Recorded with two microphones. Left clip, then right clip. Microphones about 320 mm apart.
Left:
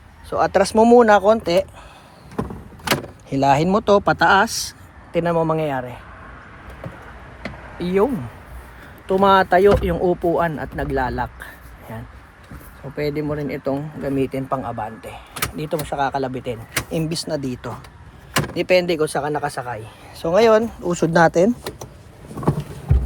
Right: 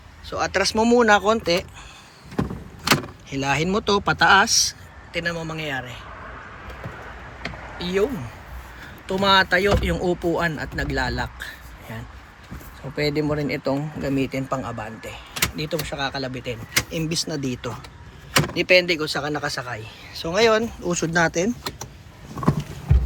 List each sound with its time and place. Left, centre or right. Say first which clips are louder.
0.3 s speech: left 5 dB; centre
3.2 s speech: left 7 dB; centre
7.8 s speech: left 4 dB; centre
9.0 s speech: left 3 dB; centre
22.3 s vehicle: right 1 dB; left